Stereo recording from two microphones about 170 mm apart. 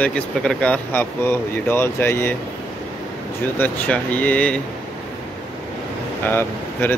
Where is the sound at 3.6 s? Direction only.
10° left (ahead or behind).